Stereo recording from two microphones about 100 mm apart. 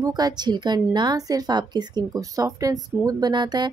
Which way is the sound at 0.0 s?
45° right (ahead or behind).